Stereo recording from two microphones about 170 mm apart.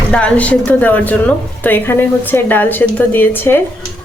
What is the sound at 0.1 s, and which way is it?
A woman's voice, 5° left (ahead or behind).